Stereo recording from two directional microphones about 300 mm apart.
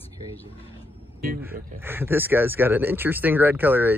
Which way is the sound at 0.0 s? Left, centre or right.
Centre.